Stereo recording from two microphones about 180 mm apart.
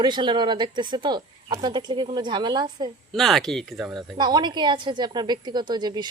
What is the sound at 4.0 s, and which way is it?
A woman's voice, 25° right (ahead or behind).